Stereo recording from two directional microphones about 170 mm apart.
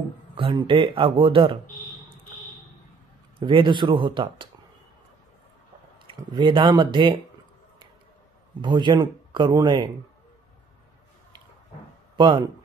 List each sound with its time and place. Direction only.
0.4 s speech: 30° right (ahead or behind)
3.3 s speech: 30° right (ahead or behind)
6.0 s speech: 30° right (ahead or behind)
8.5 s speech: 25° right (ahead or behind)
12.2 s speech: 25° right (ahead or behind)